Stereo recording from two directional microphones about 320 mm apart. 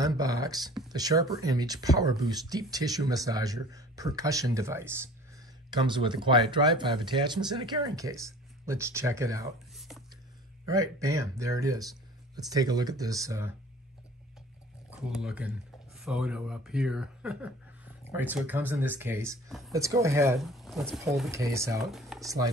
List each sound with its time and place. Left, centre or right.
0.0 s speech: centre
14.9 s speech: centre